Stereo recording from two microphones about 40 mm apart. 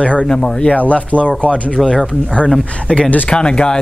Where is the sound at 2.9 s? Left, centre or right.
Left.